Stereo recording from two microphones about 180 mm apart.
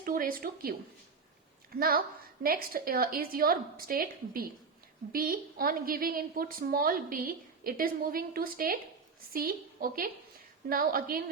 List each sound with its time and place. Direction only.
0.0 s a woman's voice: 50° right (ahead or behind)